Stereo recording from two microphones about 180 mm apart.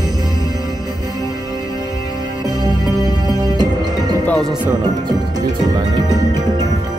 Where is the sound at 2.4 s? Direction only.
20° right (ahead or behind).